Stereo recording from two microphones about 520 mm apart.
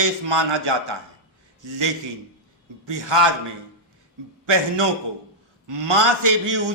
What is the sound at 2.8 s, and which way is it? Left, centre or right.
Speech, right.